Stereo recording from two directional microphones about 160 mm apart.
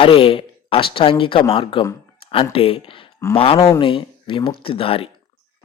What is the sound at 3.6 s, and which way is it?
Speech, 20° left (ahead or behind).